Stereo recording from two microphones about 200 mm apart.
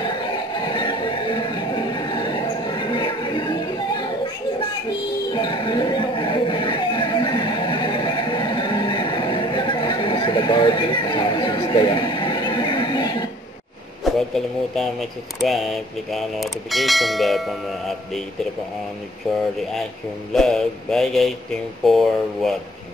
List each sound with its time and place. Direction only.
0.0 s music: 20° left (ahead or behind)
5.3 s music: 20° left (ahead or behind)
14.0 s speech: centre (ahead or behind)
20.3 s speech: centre (ahead or behind)